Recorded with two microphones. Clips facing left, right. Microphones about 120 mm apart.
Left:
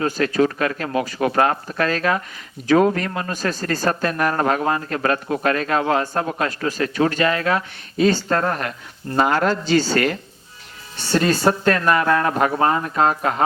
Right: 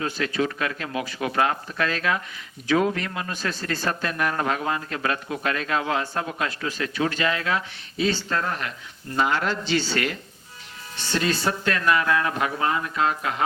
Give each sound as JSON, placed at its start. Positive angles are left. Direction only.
{"t": 0.0, "sound": "speech", "side_deg": 45}